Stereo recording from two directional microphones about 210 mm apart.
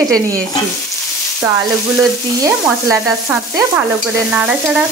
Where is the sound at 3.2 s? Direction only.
10° right (ahead or behind).